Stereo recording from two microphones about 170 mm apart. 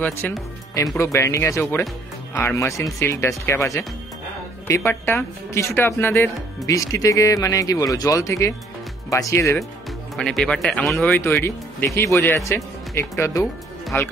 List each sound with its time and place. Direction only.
0.2 s speech: 10° left (ahead or behind)
10.1 s speech: centre (ahead or behind)
11.4 s speech: 15° left (ahead or behind)